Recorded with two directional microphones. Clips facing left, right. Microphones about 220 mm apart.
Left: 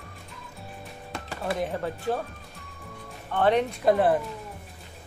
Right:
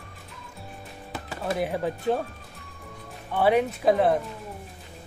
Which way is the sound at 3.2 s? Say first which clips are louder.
Right 1 dB; 10° right (ahead or behind).